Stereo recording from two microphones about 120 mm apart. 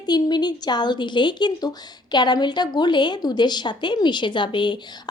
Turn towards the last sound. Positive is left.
turn(degrees=40)  # may be behind; listen again after turning